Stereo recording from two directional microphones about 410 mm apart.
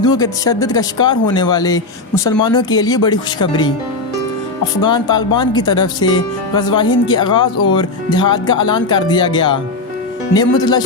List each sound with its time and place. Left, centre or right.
0.0 s speech: centre
4.8 s speech: centre